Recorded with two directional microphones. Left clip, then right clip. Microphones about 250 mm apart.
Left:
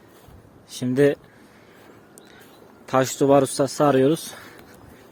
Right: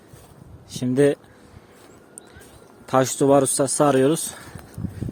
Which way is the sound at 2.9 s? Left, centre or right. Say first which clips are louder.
Right 1 dB; centre.